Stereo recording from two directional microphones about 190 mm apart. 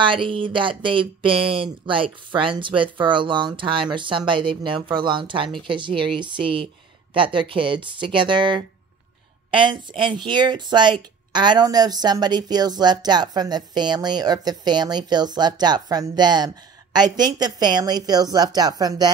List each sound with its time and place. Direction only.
0.0 s speech: 25° right (ahead or behind)